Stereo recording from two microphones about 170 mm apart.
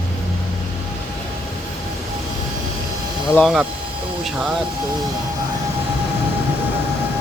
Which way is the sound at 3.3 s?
Centre (ahead or behind).